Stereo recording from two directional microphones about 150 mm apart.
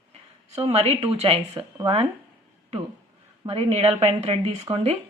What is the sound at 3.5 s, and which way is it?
Speech, 40° right (ahead or behind).